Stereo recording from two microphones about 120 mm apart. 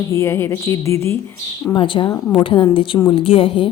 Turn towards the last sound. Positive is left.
turn(degrees=45)  # may be behind; listen again after turning